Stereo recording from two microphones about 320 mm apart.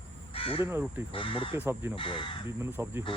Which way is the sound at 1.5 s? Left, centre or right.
Centre.